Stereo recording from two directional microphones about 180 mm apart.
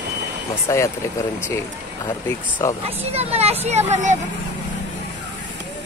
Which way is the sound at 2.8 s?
35° right (ahead or behind).